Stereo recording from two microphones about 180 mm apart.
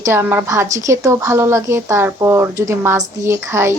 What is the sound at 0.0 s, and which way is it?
A woman's voice, 15° right (ahead or behind).